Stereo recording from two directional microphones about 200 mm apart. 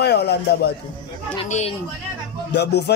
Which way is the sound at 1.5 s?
35° left (ahead or behind).